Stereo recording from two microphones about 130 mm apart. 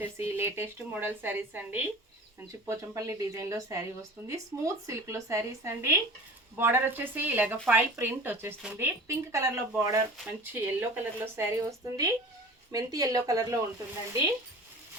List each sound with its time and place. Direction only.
0.0 s a woman's voice: 20° right (ahead or behind)